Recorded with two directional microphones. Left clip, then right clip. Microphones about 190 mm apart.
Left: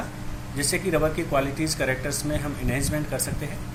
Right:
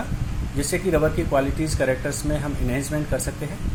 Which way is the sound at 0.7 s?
30° right (ahead or behind).